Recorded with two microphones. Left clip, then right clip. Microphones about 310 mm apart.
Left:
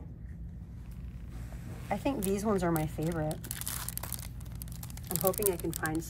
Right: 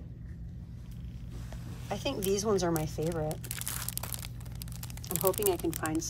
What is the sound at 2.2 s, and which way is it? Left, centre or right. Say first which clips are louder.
A woman's voice: right 4 dB; centre.